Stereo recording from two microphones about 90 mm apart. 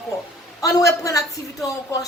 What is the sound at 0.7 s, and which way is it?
Speech, 40° left (ahead or behind).